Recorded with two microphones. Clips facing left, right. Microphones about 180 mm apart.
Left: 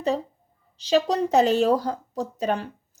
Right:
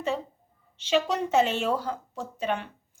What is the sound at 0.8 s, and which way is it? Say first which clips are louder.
Speech: left 4 dB; 35° left (ahead or behind).